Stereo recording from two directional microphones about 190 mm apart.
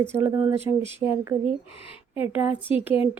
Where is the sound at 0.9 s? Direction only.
25° left (ahead or behind).